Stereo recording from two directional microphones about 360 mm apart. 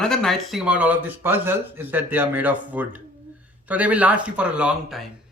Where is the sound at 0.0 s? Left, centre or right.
Centre.